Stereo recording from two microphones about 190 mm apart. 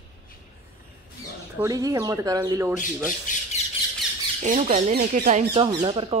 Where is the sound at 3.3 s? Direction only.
40° left (ahead or behind).